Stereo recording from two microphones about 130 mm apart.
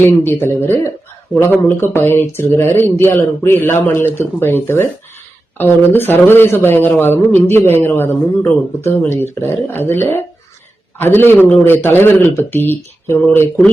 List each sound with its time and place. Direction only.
0.0 s speech: 15° left (ahead or behind)